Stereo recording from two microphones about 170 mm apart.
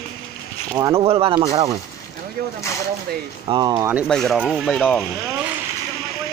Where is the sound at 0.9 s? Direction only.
35° right (ahead or behind).